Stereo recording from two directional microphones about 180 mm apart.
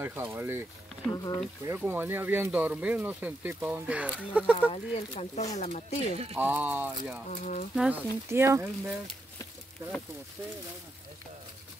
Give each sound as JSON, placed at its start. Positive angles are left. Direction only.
{"t": 0.0, "sound": "speech", "side_deg": -10}
{"t": 1.1, "sound": "speech", "side_deg": 20}
{"t": 1.8, "sound": "speech", "side_deg": -10}
{"t": 4.6, "sound": "speech", "side_deg": 40}
{"t": 6.3, "sound": "speech", "side_deg": -10}
{"t": 7.2, "sound": "speech", "side_deg": 45}
{"t": 7.7, "sound": "speech", "side_deg": -5}